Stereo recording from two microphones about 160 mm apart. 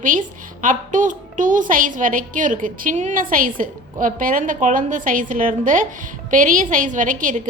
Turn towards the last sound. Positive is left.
turn(degrees=-55)  # may be behind; listen again after turning